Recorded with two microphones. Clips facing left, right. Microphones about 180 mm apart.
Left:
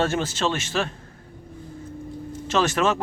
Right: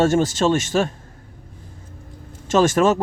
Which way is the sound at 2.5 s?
45° right (ahead or behind).